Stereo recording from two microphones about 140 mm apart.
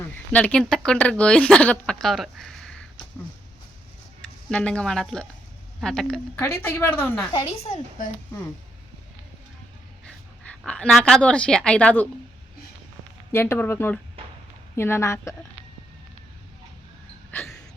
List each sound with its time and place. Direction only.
0.0 s speech: 10° left (ahead or behind)
4.4 s a woman's voice: 5° left (ahead or behind)
6.3 s speech: 15° left (ahead or behind)
7.3 s a woman's voice: 45° left (ahead or behind)
10.7 s speech: 5° left (ahead or behind)
13.3 s a woman's voice: 15° left (ahead or behind)
17.3 s a sound: 5° left (ahead or behind)